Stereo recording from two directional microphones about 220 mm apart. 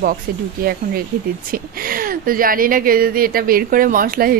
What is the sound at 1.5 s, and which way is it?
Speech, 40° right (ahead or behind).